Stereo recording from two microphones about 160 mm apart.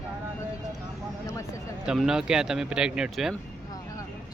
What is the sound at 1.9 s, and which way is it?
Speech, 5° right (ahead or behind).